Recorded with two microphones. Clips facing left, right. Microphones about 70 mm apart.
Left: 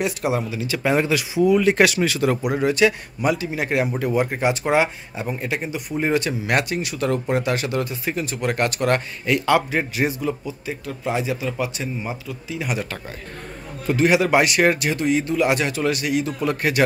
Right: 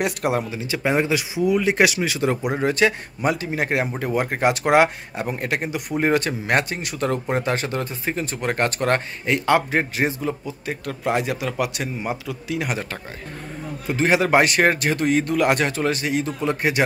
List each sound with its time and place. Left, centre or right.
0.0 s speech: right
0.5 s speech: right
2.6 s speech: right
4.0 s speech: right
4.6 s speech: right
10.7 s speech: right
12.6 s speech: right